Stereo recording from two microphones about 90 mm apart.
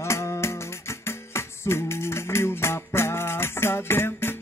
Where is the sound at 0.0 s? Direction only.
30° left (ahead or behind).